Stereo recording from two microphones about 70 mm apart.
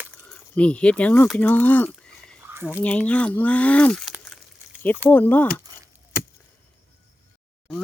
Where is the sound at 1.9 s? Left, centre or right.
Centre.